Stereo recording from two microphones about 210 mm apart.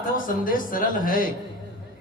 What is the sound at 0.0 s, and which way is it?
Speech, 40° left (ahead or behind).